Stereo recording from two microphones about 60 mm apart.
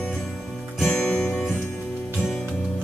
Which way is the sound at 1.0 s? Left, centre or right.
Left.